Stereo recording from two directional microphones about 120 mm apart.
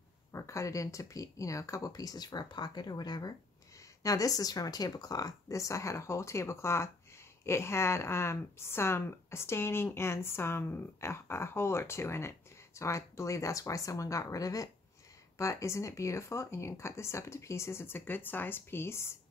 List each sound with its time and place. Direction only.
0.3 s a woman's voice: 25° left (ahead or behind)